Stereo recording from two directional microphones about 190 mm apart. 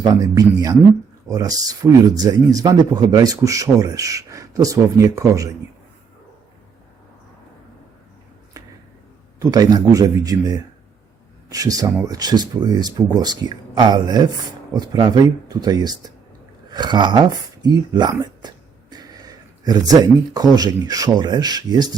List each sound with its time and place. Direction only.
0.0 s speech: 20° right (ahead or behind)
9.4 s speech: 20° right (ahead or behind)